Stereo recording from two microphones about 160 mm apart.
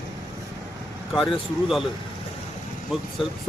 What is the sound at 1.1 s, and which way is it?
Speech, centre (ahead or behind).